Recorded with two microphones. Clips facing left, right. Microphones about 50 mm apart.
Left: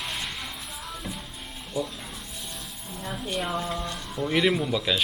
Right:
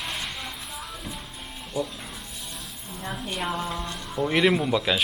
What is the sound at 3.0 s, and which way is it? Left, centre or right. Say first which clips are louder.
Speech: even; centre.